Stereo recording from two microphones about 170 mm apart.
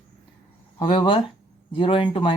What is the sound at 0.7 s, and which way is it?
Speech, 30° left (ahead or behind).